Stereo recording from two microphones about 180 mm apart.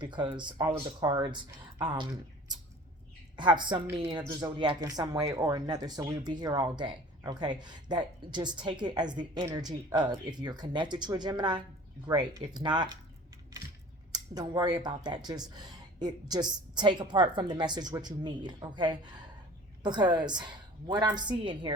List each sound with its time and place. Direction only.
0.0 s a woman's voice: 25° right (ahead or behind)
3.3 s a woman's voice: 25° right (ahead or behind)
14.1 s a woman's voice: 20° right (ahead or behind)